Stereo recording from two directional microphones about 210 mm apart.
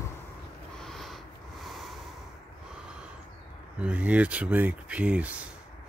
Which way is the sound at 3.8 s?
5° right (ahead or behind).